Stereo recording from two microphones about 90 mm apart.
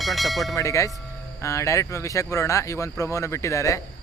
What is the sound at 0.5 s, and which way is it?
Speech, 35° left (ahead or behind).